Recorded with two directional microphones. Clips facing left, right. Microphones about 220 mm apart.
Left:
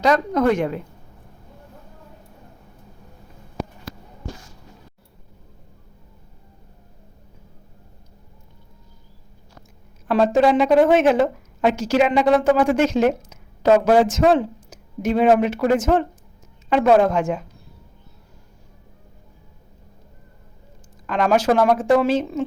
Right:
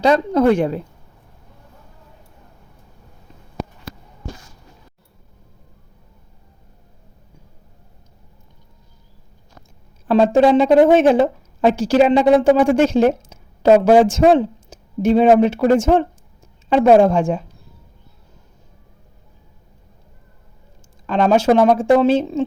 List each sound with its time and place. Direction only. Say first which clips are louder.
0.0 s a woman's voice: right 3 dB; 30° right (ahead or behind)
10.1 s a woman's voice: right 4 dB; 30° right (ahead or behind)
21.1 s speech: right 4 dB; 30° right (ahead or behind)